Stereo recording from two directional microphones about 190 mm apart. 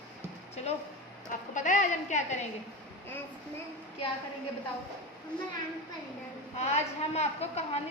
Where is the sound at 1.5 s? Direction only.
40° left (ahead or behind).